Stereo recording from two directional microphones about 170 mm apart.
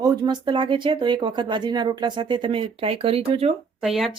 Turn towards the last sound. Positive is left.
turn(degrees=0)  # may be behind; listen again after turning